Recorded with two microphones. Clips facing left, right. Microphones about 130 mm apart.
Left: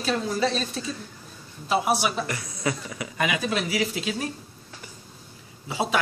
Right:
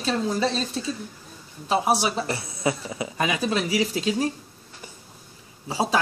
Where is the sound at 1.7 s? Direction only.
30° right (ahead or behind).